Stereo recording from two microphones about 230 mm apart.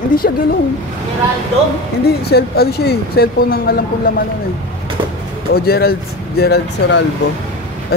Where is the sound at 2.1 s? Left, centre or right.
Left.